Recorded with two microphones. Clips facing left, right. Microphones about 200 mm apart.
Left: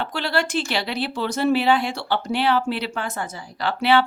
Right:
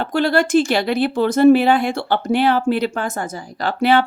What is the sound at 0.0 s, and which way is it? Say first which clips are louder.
Speech: right 7 dB; 50° right (ahead or behind).